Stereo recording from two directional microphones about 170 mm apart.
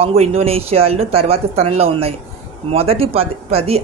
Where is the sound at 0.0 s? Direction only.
35° right (ahead or behind).